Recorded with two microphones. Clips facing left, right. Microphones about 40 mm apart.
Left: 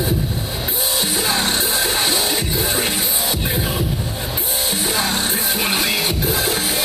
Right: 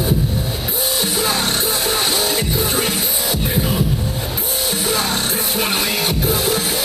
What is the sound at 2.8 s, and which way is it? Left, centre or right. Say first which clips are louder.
Music: right 1 dB; left.